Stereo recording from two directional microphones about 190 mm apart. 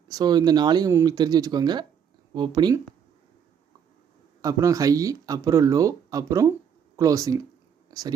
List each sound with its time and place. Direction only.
0.1 s speech: 20° right (ahead or behind)
4.4 s speech: 20° right (ahead or behind)
7.9 s whispering: 20° right (ahead or behind)